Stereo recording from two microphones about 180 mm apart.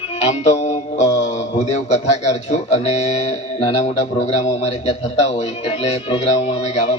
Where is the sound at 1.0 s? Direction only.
20° left (ahead or behind).